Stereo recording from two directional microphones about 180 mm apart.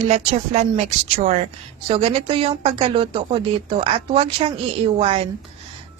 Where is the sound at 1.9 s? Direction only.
30° right (ahead or behind).